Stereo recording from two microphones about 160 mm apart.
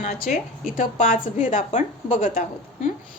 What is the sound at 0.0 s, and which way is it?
A woman's voice, 50° left (ahead or behind).